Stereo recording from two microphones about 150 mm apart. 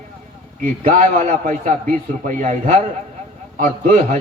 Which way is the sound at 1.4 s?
60° right (ahead or behind).